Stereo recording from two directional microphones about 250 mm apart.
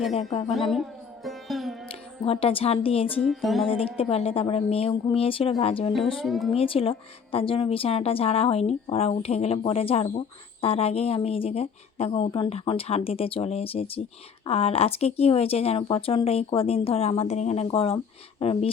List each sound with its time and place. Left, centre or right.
0.1 s a woman's voice: left
0.4 s music: centre
1.9 s speech: left
3.2 s music: centre
4.1 s a woman's voice: left
6.1 s music: centre
6.5 s a woman's voice: left